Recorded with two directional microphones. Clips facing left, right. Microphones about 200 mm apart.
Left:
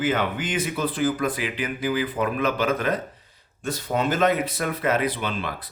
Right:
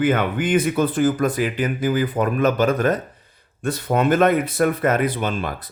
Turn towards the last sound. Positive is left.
turn(degrees=-45)  # may be behind; listen again after turning